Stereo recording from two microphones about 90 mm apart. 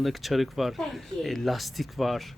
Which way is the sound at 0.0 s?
Centre (ahead or behind).